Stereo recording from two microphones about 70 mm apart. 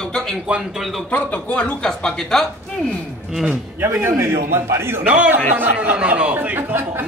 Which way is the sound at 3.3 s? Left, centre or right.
Centre.